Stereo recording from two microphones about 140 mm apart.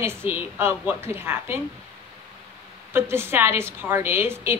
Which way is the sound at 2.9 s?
15° right (ahead or behind).